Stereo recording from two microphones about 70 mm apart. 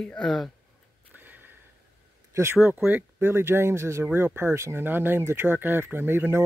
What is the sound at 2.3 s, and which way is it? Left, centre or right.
Speech, right.